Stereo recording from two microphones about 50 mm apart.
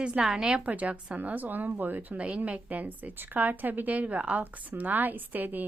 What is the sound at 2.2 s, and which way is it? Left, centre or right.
A woman's voice, right.